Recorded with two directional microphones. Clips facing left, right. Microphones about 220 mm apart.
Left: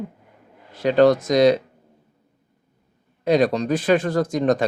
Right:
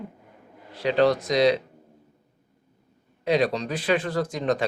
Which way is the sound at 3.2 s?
45° left (ahead or behind).